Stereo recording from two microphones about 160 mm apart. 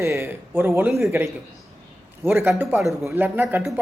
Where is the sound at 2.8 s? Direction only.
Centre (ahead or behind).